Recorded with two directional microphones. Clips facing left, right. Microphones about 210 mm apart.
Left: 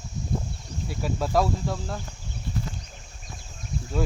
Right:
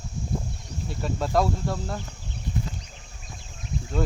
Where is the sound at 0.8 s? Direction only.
5° left (ahead or behind).